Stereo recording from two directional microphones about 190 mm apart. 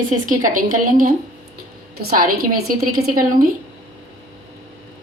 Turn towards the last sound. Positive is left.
turn(degrees=-50)  # may be behind; listen again after turning